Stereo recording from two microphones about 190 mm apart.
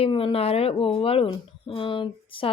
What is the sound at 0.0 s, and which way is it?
Speech, 30° left (ahead or behind).